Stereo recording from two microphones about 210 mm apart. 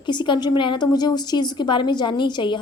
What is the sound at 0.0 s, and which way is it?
A woman's voice, 20° left (ahead or behind).